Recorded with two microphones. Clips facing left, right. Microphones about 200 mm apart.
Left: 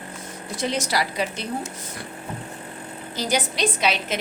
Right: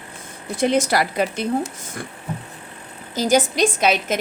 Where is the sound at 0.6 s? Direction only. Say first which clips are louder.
Right 7 dB; 55° right (ahead or behind).